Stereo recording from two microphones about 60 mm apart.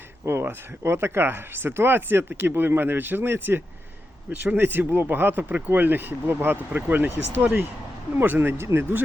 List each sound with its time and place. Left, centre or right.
0.3 s speech: right